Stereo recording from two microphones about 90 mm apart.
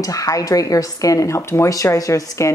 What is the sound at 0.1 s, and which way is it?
Speech, 40° left (ahead or behind).